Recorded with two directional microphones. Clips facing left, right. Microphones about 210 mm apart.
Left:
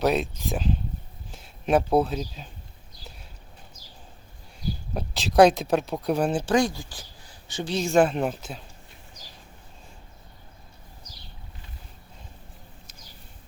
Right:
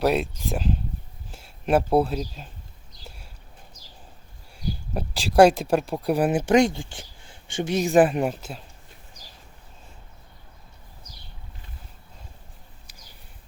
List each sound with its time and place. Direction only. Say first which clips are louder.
0.0 s speech: right 1 dB; 5° right (ahead or behind)
4.9 s speech: right 1 dB; 5° right (ahead or behind)
6.3 s speech: right 4 dB; 20° right (ahead or behind)
8.1 s speech: right 2 dB; 5° right (ahead or behind)